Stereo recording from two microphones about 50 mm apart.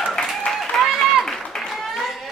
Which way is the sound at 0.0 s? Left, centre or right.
Centre.